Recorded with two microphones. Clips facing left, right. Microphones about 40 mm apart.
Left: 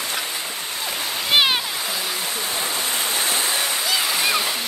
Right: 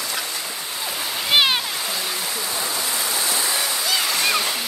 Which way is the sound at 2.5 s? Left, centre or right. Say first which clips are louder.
Left 1 dB; left.